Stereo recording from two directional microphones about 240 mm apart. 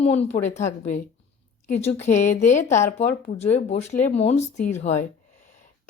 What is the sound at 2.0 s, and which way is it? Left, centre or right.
Speech, left.